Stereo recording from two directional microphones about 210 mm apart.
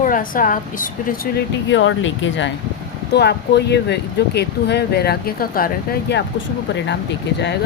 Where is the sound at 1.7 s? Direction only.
65° left (ahead or behind).